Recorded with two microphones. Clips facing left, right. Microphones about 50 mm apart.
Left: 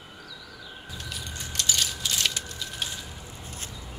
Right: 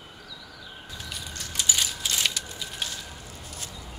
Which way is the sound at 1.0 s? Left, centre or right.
Centre.